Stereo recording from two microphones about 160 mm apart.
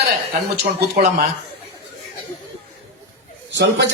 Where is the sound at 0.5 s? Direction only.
90° right.